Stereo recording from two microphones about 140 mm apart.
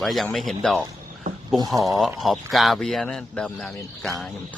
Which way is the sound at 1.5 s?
30° right (ahead or behind).